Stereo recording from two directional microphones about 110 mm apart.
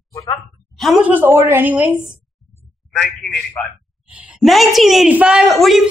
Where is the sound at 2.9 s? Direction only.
Centre (ahead or behind).